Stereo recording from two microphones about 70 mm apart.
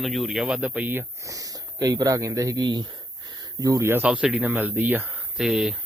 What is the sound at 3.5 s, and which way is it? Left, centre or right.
Speech, right.